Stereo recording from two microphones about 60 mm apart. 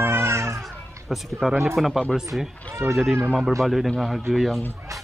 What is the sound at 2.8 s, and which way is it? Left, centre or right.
Speech, right.